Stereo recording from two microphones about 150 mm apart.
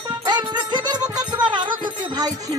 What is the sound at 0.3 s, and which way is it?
Music, 30° right (ahead or behind).